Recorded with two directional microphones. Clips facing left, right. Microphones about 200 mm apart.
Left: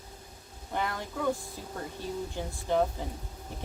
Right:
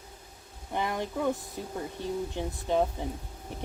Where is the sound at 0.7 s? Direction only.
20° right (ahead or behind).